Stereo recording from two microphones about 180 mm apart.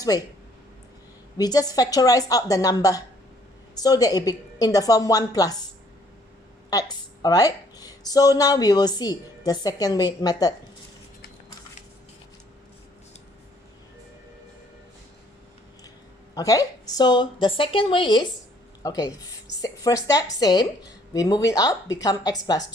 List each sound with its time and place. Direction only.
1.4 s a woman's voice: 20° left (ahead or behind)
6.7 s a woman's voice: 20° left (ahead or behind)
16.3 s a woman's voice: 20° left (ahead or behind)